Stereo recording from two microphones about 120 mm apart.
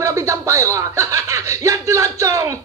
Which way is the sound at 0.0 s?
25° right (ahead or behind).